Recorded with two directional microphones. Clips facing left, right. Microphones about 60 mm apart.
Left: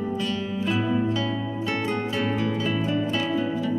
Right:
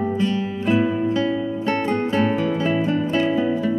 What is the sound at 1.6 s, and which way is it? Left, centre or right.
Music, right.